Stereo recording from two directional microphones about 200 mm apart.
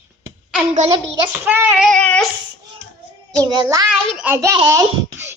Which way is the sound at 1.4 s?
10° right (ahead or behind).